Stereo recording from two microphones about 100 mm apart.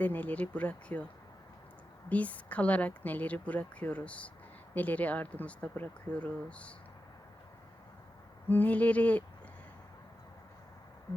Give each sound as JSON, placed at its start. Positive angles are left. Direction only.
{"t": 0.0, "sound": "speech", "side_deg": 15}
{"t": 2.0, "sound": "speech", "side_deg": 15}
{"t": 8.4, "sound": "speech", "side_deg": 15}